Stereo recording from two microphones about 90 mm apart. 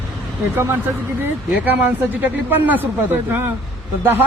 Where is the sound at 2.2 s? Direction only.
20° right (ahead or behind).